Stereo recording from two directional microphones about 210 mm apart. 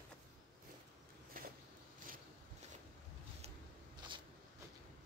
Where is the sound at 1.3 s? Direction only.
40° right (ahead or behind).